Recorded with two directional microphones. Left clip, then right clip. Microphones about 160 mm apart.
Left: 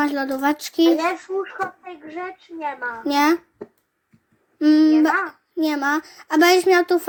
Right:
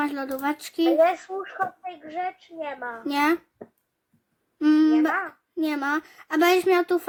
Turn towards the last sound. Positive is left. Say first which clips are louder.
# left 5 dB
turn(degrees=-15)  # may be behind; listen again after turning